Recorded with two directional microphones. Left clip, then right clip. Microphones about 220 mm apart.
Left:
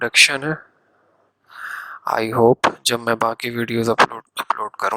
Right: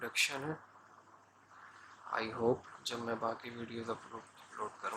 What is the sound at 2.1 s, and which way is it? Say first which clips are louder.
Speech: left 19 dB; 50° left (ahead or behind).